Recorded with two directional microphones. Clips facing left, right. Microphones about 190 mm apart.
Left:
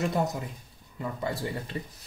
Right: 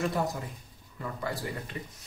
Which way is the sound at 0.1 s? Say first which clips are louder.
Left 2 dB; 20° left (ahead or behind).